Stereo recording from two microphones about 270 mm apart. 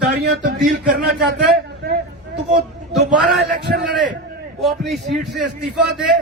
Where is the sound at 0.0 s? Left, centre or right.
Right.